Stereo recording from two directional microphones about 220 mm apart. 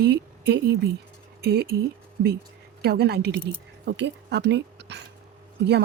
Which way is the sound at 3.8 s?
50° right (ahead or behind).